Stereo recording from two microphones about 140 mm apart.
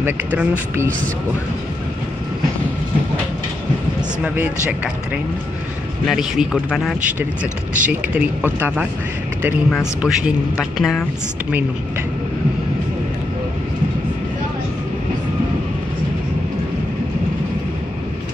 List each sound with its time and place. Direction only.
0.0 s speech: 15° right (ahead or behind)
4.2 s a man's voice: 10° right (ahead or behind)
9.7 s a man's voice: centre (ahead or behind)